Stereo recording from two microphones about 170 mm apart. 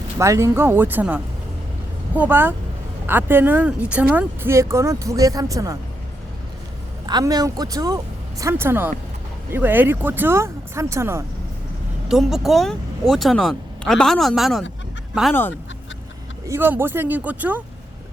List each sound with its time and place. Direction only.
0.2 s speech: 15° right (ahead or behind)
7.1 s speech: 25° right (ahead or behind)
12.0 s speech: centre (ahead or behind)
16.5 s speech: 15° right (ahead or behind)